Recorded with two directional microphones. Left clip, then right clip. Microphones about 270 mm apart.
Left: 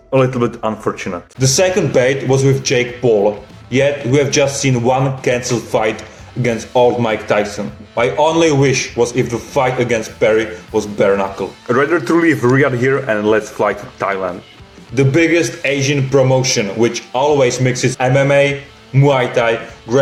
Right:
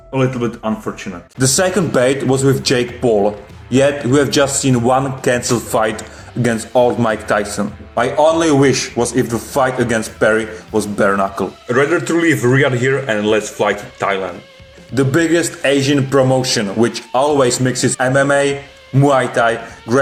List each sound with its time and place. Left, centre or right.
0.1 s a man's voice: centre
1.4 s a man's voice: right
11.7 s a man's voice: centre
14.9 s a man's voice: right